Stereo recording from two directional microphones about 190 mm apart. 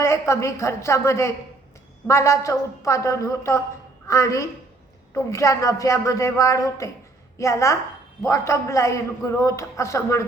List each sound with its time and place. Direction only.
0.0 s a man's voice: 15° left (ahead or behind)